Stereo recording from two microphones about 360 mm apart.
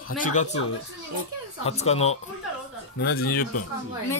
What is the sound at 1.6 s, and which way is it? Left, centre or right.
Speech, centre.